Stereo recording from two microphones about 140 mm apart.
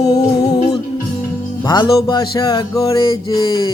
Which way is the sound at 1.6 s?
30° left (ahead or behind).